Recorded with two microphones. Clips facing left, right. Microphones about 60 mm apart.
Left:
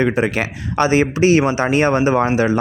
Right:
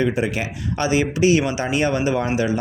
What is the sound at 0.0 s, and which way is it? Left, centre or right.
Speech, left.